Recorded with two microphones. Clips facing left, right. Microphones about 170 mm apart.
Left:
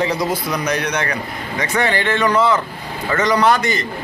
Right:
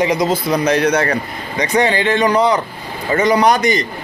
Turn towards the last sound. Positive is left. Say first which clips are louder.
# right 3 dB
turn(degrees=-15)  # may be behind; listen again after turning